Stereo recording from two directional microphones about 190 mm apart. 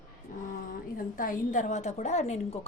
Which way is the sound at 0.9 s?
45° left (ahead or behind).